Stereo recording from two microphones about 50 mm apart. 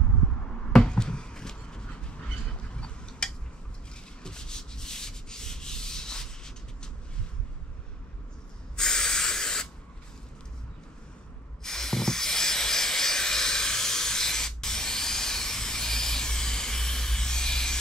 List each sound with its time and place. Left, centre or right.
0.7 s a sound: centre
4.2 s rub: centre
8.7 s spray: centre
11.6 s hiss: centre